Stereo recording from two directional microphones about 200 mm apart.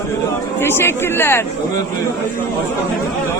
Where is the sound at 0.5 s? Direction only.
10° left (ahead or behind).